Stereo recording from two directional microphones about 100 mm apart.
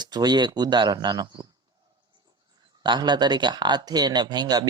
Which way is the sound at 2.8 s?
50° right (ahead or behind).